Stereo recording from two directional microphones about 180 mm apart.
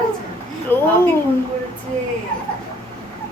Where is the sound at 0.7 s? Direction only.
10° left (ahead or behind).